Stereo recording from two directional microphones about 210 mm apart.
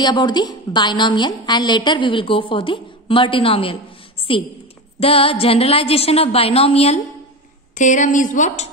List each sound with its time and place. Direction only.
0.0 s a woman's voice: 20° left (ahead or behind)
5.0 s a woman's voice: 25° left (ahead or behind)